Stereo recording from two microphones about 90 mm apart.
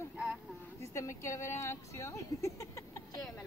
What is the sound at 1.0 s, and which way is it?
A woman's voice, 30° left (ahead or behind).